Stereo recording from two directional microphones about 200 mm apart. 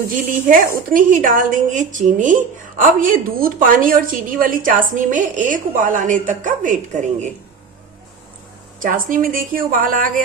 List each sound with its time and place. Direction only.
0.4 s a woman's voice: 45° right (ahead or behind)
8.8 s a woman's voice: 40° right (ahead or behind)